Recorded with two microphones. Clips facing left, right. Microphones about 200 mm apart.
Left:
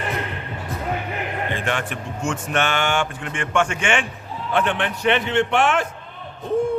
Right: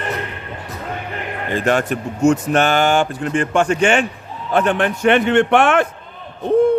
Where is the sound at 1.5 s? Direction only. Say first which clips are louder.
Right 8 dB; 40° right (ahead or behind); by 5.9 s 55° right (ahead or behind).